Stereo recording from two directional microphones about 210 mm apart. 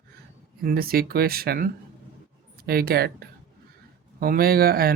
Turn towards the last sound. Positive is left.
turn(degrees=-45)  # may be behind; listen again after turning